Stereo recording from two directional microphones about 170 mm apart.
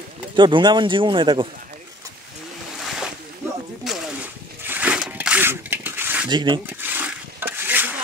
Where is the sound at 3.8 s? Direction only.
5° right (ahead or behind).